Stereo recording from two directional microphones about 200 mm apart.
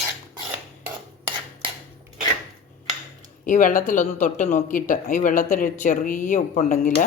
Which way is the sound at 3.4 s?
40° left (ahead or behind).